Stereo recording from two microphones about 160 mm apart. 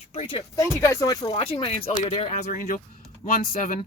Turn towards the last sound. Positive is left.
turn(degrees=60)  # may be behind; listen again after turning